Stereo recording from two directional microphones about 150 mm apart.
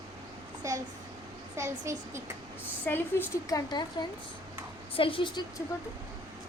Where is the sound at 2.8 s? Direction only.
15° left (ahead or behind).